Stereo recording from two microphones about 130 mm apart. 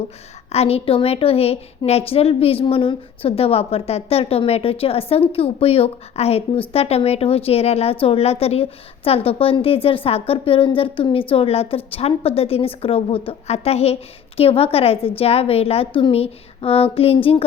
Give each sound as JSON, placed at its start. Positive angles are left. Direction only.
{"t": 0.5, "sound": "a woman's voice", "side_deg": 50}